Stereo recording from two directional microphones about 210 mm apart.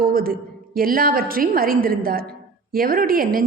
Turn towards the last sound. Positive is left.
turn(degrees=-45)  # may be behind; listen again after turning